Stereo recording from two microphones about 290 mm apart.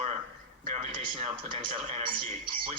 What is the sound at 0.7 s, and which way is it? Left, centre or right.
Speech, right.